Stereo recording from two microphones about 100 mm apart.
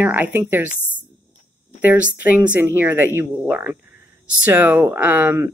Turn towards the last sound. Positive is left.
turn(degrees=-25)  # may be behind; listen again after turning